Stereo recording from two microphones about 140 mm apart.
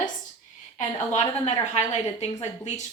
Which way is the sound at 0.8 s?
55° left (ahead or behind).